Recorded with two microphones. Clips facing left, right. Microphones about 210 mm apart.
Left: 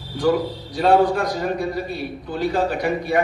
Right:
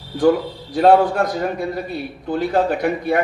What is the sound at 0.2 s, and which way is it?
A man's voice, 50° right (ahead or behind).